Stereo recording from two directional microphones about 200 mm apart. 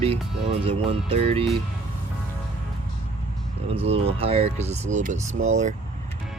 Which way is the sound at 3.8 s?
30° right (ahead or behind).